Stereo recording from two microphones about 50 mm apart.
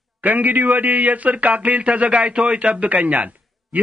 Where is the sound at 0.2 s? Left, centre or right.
Right.